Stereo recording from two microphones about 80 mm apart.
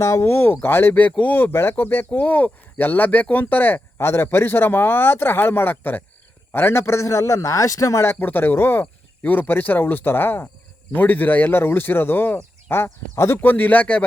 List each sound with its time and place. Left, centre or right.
0.0 s a man's voice: left
8.1 s speech: left